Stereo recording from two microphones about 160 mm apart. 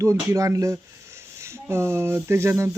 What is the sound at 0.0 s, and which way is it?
Speech, 20° right (ahead or behind).